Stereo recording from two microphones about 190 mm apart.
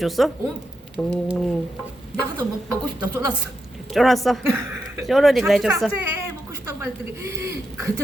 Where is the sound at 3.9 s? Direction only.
Centre (ahead or behind).